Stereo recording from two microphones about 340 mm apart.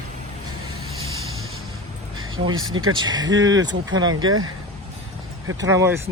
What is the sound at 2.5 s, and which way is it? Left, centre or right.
Speech, right.